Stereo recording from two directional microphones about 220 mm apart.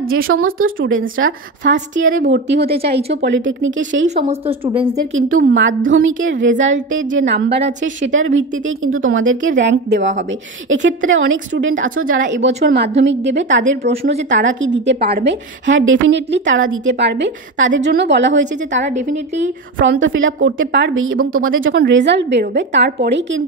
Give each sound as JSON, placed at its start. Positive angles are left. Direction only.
{"t": 0.1, "sound": "a woman's voice", "side_deg": -70}
{"t": 2.0, "sound": "a woman's voice", "side_deg": -35}
{"t": 2.3, "sound": "a woman's voice", "side_deg": -50}
{"t": 4.1, "sound": "speech", "side_deg": -30}
{"t": 5.5, "sound": "a woman's voice", "side_deg": -60}
{"t": 12.4, "sound": "a woman's voice", "side_deg": -30}
{"t": 13.0, "sound": "a woman's voice", "side_deg": -55}
{"t": 13.6, "sound": "a woman's voice", "side_deg": -30}
{"t": 14.3, "sound": "a woman's voice", "side_deg": -60}
{"t": 18.9, "sound": "a woman's voice", "side_deg": -35}
{"t": 19.8, "sound": "a woman's voice", "side_deg": -60}